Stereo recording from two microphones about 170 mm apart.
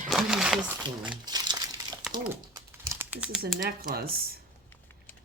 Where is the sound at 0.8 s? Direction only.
25° right (ahead or behind).